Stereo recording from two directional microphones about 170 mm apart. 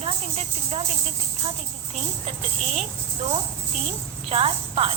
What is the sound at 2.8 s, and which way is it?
A woman's voice, 35° right (ahead or behind).